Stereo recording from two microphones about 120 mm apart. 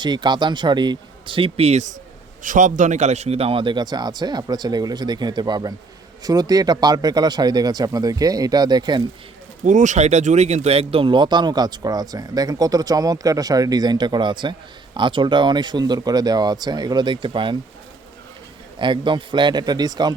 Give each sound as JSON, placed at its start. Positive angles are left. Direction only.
{"t": 0.0, "sound": "speech", "side_deg": -40}
{"t": 2.4, "sound": "speech", "side_deg": -90}
{"t": 9.6, "sound": "speech", "side_deg": -90}
{"t": 18.8, "sound": "speech", "side_deg": -45}